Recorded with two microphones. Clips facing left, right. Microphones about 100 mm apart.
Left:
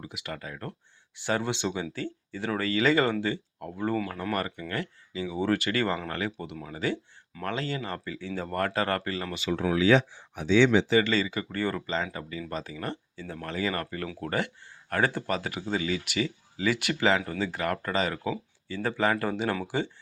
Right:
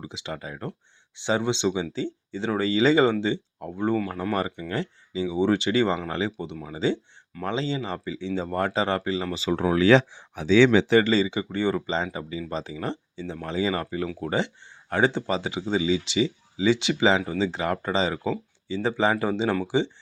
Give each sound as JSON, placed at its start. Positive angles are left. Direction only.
{"t": 0.1, "sound": "speech", "side_deg": -25}
{"t": 9.6, "sound": "speech", "side_deg": -50}
{"t": 9.8, "sound": "speech", "side_deg": -90}
{"t": 11.0, "sound": "speech", "side_deg": -30}
{"t": 12.0, "sound": "speech", "side_deg": -15}